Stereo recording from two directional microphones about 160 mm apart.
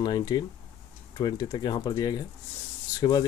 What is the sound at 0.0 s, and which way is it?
Speech, 25° left (ahead or behind).